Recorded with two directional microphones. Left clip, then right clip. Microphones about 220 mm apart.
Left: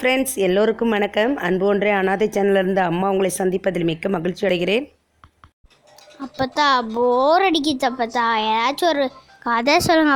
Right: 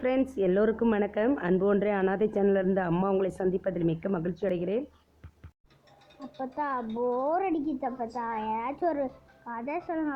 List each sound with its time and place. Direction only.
0.0 s speech: 20° left (ahead or behind)
6.4 s speech: 30° left (ahead or behind)
6.9 s speech: 45° left (ahead or behind)
7.3 s speech: 25° left (ahead or behind)
9.4 s speech: 40° left (ahead or behind)